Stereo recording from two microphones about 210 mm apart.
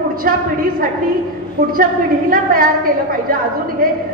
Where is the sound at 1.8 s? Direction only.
45° right (ahead or behind).